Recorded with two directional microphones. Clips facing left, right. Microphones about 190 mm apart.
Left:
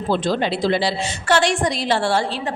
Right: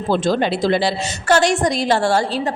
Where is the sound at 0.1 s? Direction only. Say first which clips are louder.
Right 3 dB; 45° right (ahead or behind).